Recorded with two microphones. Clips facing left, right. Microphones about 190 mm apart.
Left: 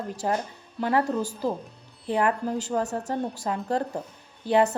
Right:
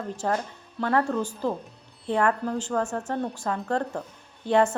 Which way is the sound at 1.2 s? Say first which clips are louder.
Even; 40° left (ahead or behind).